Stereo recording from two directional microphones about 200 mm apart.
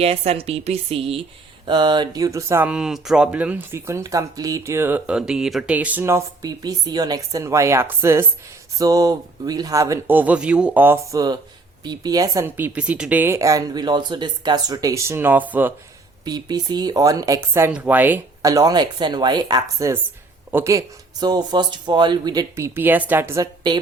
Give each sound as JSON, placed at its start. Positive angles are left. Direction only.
{"t": 0.0, "sound": "speech", "side_deg": -30}
{"t": 16.2, "sound": "speech", "side_deg": -20}